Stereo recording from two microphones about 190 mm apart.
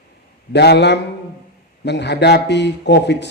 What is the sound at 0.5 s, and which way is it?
A man's voice, 60° left (ahead or behind).